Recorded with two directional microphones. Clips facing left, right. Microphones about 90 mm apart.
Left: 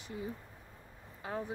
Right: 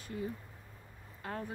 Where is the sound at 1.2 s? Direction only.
15° left (ahead or behind).